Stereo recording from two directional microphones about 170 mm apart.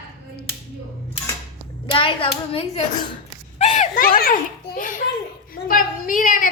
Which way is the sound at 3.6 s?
40° left (ahead or behind).